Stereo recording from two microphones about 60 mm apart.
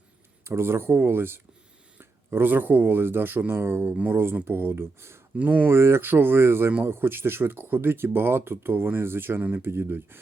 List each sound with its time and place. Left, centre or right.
0.4 s speech: right
5.4 s speech: right
5.7 s speech: right